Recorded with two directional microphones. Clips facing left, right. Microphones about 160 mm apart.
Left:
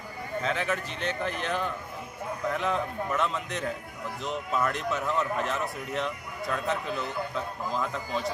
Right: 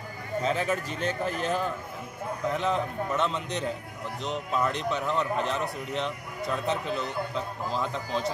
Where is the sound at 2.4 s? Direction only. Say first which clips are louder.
Right 1 dB; centre (ahead or behind).